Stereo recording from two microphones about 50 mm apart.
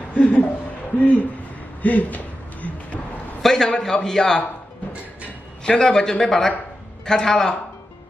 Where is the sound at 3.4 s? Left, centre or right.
Centre.